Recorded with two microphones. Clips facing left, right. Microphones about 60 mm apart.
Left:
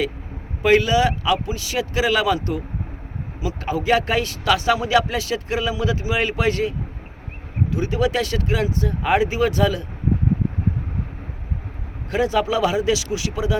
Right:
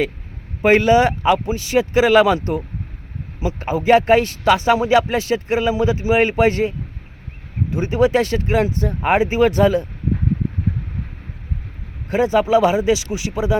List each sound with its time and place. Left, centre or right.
0.6 s speech: right
12.1 s speech: right